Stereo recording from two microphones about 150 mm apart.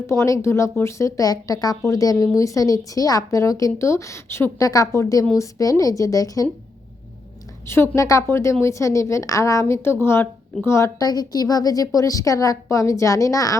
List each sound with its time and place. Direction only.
0.1 s a woman's voice: 20° left (ahead or behind)
7.7 s a woman's voice: 20° left (ahead or behind)